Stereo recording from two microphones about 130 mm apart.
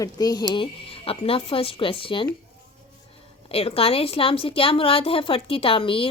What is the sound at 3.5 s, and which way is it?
A woman's voice, 50° left (ahead or behind).